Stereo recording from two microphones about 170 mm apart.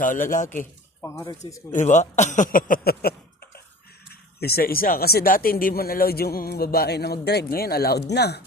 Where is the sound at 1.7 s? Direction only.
45° left (ahead or behind); by 8.4 s 75° left (ahead or behind).